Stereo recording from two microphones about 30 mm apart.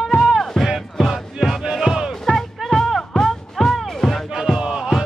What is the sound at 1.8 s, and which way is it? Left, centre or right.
Music, right.